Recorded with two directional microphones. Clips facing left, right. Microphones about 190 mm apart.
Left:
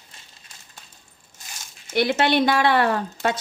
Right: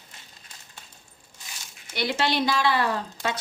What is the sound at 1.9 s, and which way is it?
Speech, 55° left (ahead or behind).